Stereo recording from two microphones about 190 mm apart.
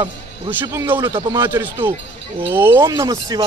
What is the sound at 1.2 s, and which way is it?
Speech, 25° right (ahead or behind).